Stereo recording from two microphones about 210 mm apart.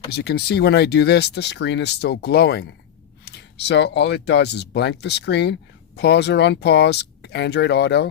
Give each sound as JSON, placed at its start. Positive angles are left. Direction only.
{"t": 0.1, "sound": "speech", "side_deg": 50}